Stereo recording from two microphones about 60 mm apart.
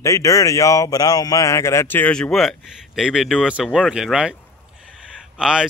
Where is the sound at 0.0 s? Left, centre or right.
Left.